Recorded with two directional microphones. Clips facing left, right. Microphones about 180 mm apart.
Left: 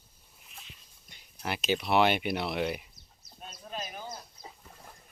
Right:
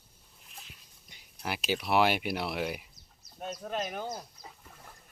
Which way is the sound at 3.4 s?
65° right (ahead or behind).